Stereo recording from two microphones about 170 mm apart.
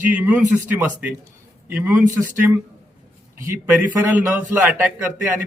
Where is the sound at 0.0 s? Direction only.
10° right (ahead or behind).